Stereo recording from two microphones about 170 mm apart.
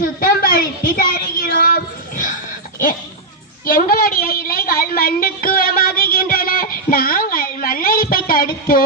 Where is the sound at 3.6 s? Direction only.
60° left (ahead or behind).